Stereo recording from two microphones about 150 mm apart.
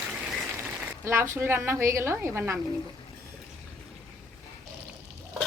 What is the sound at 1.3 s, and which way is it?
A woman's voice, 15° right (ahead or behind).